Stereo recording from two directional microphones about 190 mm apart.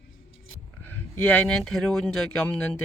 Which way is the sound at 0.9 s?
10° left (ahead or behind).